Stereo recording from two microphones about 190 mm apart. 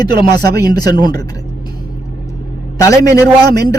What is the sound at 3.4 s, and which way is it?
Speech, 55° right (ahead or behind).